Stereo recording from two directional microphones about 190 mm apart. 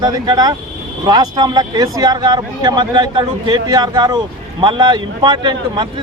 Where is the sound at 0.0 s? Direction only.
20° right (ahead or behind).